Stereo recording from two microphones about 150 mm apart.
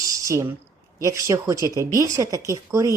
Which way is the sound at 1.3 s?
20° right (ahead or behind).